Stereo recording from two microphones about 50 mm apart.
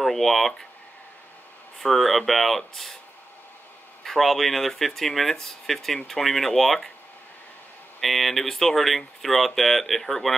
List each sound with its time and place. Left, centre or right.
0.0 s speech: centre
1.8 s speech: centre
4.0 s speech: centre
8.0 s speech: centre